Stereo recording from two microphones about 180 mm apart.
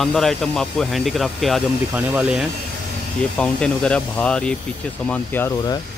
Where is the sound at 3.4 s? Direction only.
5° left (ahead or behind).